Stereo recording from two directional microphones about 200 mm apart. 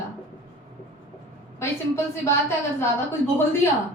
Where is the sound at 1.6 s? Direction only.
15° left (ahead or behind).